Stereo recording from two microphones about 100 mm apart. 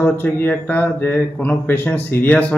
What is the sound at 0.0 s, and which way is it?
Speech, 20° left (ahead or behind).